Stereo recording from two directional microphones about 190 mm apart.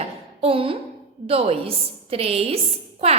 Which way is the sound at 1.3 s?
30° right (ahead or behind).